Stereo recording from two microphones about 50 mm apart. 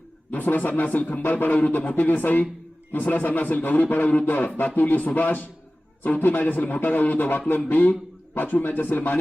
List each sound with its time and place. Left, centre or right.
0.3 s a man's voice: left